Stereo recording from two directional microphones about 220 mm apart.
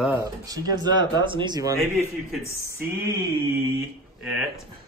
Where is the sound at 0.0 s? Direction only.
10° right (ahead or behind).